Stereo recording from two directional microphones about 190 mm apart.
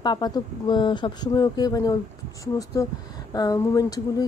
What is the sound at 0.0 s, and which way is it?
Speech, 20° left (ahead or behind).